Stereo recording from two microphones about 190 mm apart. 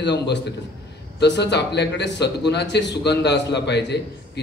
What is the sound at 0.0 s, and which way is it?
Speech, 65° left (ahead or behind).